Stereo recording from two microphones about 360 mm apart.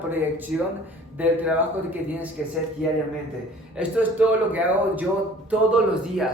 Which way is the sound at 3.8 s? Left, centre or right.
Centre.